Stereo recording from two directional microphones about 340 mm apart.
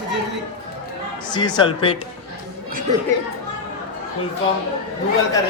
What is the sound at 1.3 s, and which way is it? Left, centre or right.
Speech, centre.